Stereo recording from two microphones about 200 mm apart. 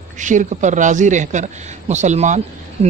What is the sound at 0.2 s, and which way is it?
Speech, 40° right (ahead or behind).